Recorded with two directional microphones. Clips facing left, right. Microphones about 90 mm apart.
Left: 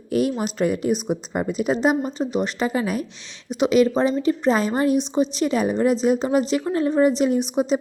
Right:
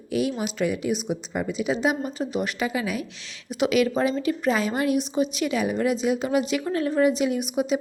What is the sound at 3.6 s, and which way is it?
A woman's voice, 30° left (ahead or behind).